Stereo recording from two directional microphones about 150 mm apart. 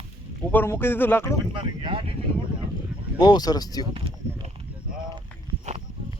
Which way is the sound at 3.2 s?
25° left (ahead or behind).